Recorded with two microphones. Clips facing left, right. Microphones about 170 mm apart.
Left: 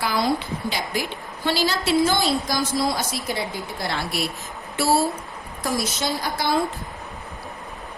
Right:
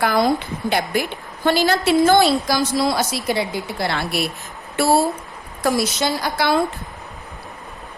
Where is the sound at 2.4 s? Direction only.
75° right (ahead or behind).